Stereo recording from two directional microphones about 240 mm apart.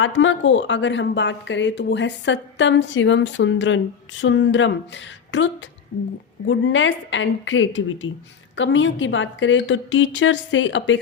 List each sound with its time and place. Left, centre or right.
0.0 s speech: left